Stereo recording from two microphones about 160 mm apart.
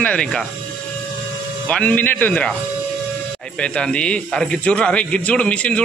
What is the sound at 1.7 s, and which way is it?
Speech, 10° left (ahead or behind).